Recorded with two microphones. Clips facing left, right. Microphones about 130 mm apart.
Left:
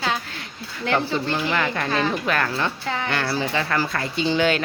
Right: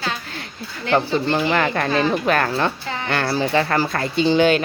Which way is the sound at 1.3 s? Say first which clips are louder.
Right 4 dB; 60° right (ahead or behind).